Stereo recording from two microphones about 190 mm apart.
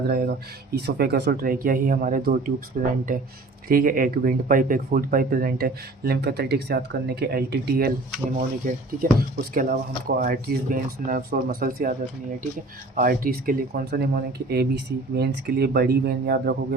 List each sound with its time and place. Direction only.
0.1 s speech: 55° right (ahead or behind)
13.0 s speech: 50° right (ahead or behind)